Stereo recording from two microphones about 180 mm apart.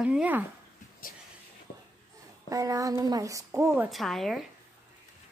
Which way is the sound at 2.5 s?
20° right (ahead or behind).